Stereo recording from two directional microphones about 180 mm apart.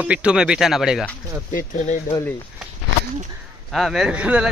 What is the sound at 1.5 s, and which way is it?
Speech, 45° left (ahead or behind).